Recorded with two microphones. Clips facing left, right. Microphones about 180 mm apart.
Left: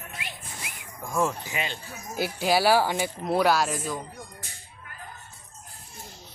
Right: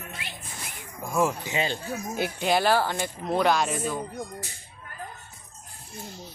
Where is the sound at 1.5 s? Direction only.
30° right (ahead or behind).